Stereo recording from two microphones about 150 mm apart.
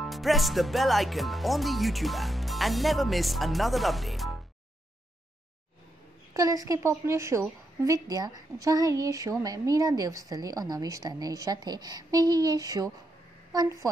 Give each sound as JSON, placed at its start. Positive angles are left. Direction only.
{"t": 0.0, "sound": "speech", "side_deg": 0}
{"t": 6.3, "sound": "a woman's voice", "side_deg": -25}